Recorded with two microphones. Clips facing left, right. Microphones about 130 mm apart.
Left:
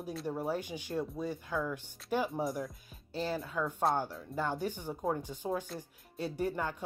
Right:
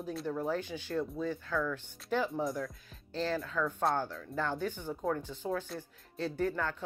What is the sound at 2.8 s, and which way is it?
Speech, 10° left (ahead or behind).